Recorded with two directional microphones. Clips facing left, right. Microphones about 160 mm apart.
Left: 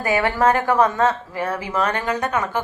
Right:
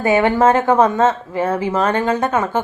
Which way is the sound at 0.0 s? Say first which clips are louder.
Right 5 dB; 20° right (ahead or behind).